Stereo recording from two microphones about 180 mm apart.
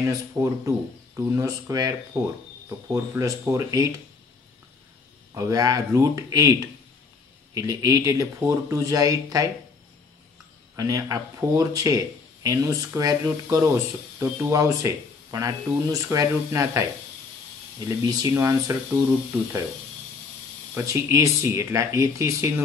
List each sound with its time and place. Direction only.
0.0 s speech: 15° right (ahead or behind)
5.3 s speech: 20° right (ahead or behind)
7.5 s speech: 20° right (ahead or behind)
10.8 s speech: 20° right (ahead or behind)
17.8 s speech: 20° right (ahead or behind)
20.7 s speech: 15° right (ahead or behind)